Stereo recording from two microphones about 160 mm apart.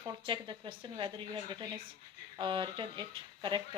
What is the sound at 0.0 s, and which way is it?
Speech, 30° right (ahead or behind).